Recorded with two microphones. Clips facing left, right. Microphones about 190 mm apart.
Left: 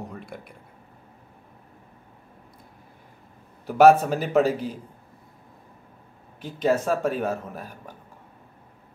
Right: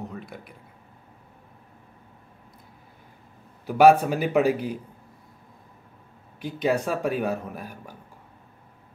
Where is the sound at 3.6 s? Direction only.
5° right (ahead or behind).